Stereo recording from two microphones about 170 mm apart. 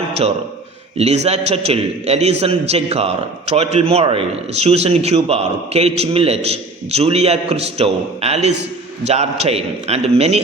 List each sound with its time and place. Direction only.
0.9 s a man's voice: 40° right (ahead or behind)